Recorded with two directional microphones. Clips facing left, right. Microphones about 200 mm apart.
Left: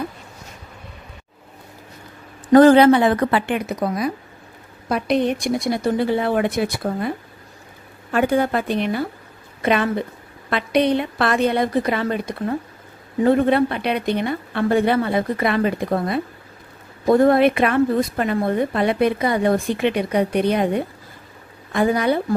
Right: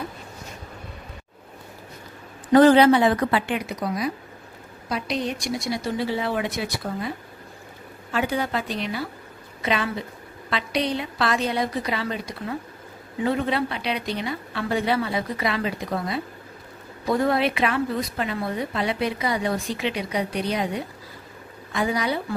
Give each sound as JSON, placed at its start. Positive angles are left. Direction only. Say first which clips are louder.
{"t": 2.5, "sound": "a woman's voice", "louder": "left 4 dB", "side_deg": 50}